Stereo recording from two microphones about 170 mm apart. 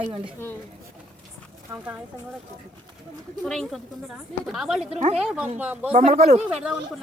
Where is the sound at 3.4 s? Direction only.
5° left (ahead or behind).